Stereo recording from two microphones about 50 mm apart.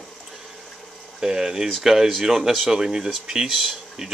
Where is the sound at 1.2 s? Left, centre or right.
Centre.